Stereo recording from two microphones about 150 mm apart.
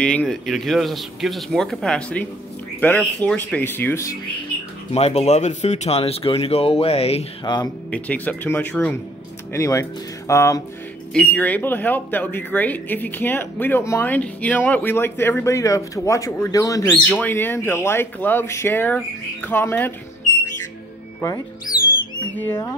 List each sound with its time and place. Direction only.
0.0 s speech: 5° left (ahead or behind)
4.9 s speech: 45° left (ahead or behind)
7.4 s speech: 25° left (ahead or behind)
7.9 s speech: 10° left (ahead or behind)
22.3 s speech: 15° left (ahead or behind)